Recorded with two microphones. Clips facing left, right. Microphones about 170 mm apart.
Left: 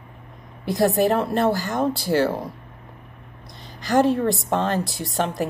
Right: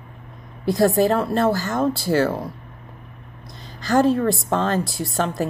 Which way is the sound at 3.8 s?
15° left (ahead or behind).